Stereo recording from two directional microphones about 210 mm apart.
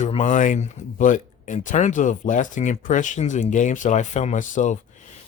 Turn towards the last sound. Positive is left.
turn(degrees=35)  # may be behind; listen again after turning